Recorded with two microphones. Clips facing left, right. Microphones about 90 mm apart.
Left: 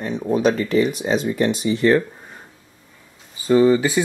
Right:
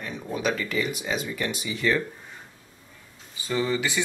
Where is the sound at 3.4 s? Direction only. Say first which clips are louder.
Left 11 dB; 35° left (ahead or behind).